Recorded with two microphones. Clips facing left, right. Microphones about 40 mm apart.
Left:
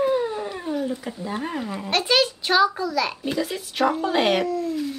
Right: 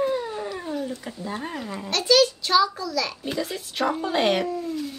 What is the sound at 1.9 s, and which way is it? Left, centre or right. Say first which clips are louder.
A child's voice: right 2 dB; left.